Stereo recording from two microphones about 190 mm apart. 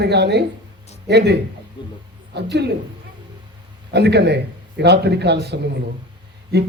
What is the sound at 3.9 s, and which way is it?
A child's voice, 60° right (ahead or behind).